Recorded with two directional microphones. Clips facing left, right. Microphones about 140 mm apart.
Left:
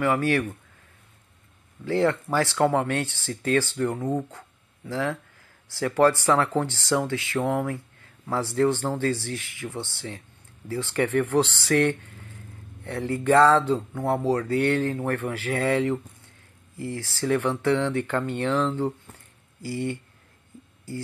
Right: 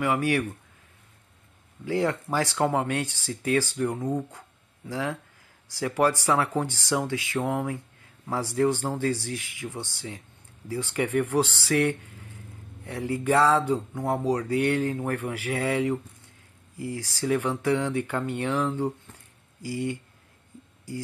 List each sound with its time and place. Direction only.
0.0 s speech: 15° right (ahead or behind)
1.9 s speech: 15° right (ahead or behind)